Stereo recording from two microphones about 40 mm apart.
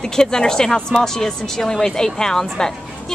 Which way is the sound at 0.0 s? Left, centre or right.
Centre.